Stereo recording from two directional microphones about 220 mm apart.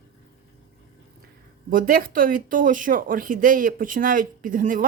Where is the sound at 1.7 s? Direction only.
40° right (ahead or behind).